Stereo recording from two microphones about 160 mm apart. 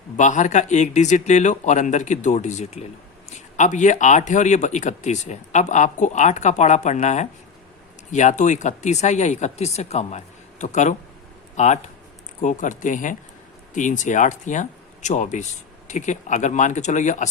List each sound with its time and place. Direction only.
0.2 s speech: 50° left (ahead or behind)